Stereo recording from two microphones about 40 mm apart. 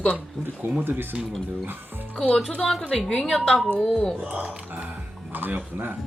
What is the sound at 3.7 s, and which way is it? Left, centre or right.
Speech, centre.